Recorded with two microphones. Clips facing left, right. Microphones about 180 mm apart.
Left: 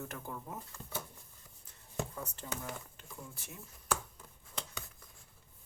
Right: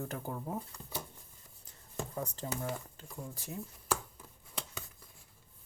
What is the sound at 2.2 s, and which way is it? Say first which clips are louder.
Speech: right 6 dB; 35° right (ahead or behind).